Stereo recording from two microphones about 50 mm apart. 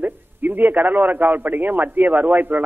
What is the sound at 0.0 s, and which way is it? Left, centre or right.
A man's voice, right.